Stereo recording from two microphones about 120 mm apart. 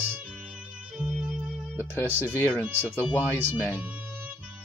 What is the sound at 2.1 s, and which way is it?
Speech, 15° right (ahead or behind).